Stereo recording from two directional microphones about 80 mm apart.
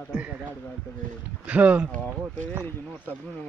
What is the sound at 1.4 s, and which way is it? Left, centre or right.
Speech, centre.